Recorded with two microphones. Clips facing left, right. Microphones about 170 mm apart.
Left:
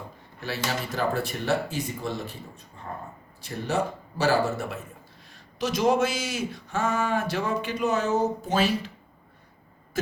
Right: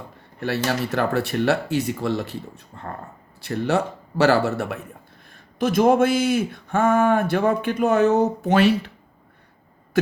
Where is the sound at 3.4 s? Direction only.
70° right (ahead or behind).